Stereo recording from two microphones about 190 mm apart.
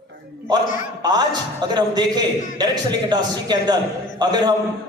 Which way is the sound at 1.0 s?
20° right (ahead or behind).